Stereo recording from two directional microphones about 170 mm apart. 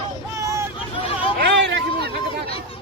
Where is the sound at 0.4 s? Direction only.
15° right (ahead or behind).